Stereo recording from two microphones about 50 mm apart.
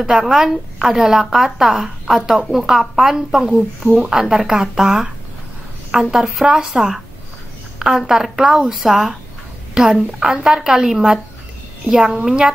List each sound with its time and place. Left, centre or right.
0.0 s a woman's voice: centre
6.0 s speech: centre
6.4 s a woman's voice: centre
8.1 s a woman's voice: centre